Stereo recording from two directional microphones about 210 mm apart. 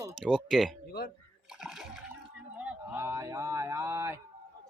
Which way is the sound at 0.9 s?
45° left (ahead or behind).